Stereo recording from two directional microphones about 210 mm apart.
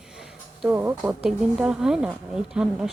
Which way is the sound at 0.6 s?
10° right (ahead or behind).